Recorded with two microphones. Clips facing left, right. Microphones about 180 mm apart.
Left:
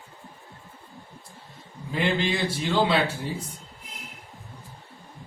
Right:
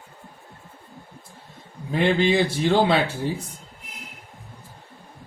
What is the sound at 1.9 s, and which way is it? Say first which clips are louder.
Speech: right 6 dB; 55° right (ahead or behind).